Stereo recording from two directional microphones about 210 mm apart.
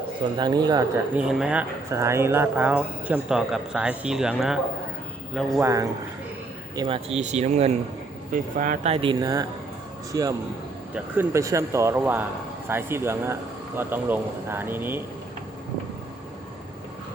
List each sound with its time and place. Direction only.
0.3 s speech: 20° right (ahead or behind)
1.1 s speech: 5° right (ahead or behind)
5.5 s speech: 15° right (ahead or behind)
6.7 s speech: 25° right (ahead or behind); by 15.0 s 10° right (ahead or behind)